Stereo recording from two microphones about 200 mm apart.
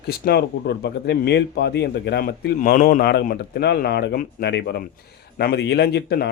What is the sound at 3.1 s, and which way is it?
A man's voice, 50° left (ahead or behind).